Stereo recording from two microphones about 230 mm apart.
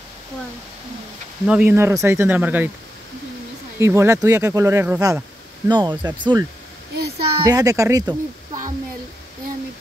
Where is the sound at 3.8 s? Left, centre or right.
Centre.